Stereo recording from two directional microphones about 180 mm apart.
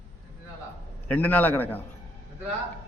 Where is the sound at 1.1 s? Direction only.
10° left (ahead or behind).